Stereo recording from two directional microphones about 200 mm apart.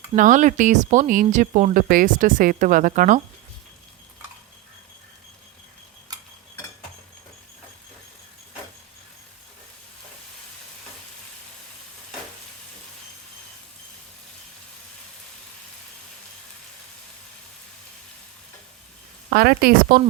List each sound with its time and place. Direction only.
0.2 s speech: 40° right (ahead or behind)
19.3 s speech: 50° right (ahead or behind)